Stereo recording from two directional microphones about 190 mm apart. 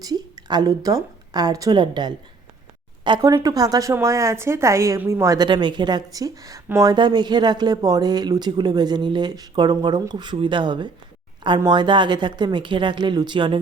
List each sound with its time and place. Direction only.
0.0 s a woman's voice: 20° right (ahead or behind)